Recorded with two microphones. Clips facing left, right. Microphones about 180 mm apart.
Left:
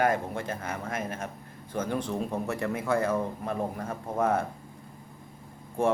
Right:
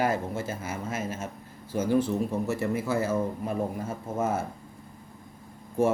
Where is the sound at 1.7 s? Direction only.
5° right (ahead or behind).